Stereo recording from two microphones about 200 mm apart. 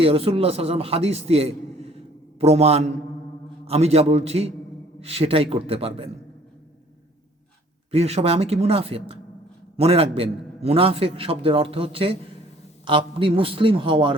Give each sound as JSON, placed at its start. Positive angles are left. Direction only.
{"t": 0.0, "sound": "a man's voice", "side_deg": -30}
{"t": 7.9, "sound": "a man's voice", "side_deg": -30}